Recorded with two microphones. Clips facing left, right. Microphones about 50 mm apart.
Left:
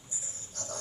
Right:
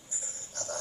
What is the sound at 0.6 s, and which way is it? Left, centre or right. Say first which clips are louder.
Jingle bell: right 4 dB; right.